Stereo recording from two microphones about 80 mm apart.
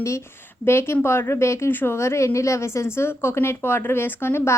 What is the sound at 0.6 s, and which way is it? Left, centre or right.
A woman's voice, left.